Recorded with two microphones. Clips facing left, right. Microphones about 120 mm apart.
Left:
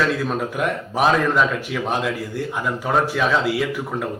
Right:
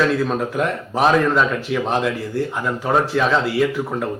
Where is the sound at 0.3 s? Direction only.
5° left (ahead or behind).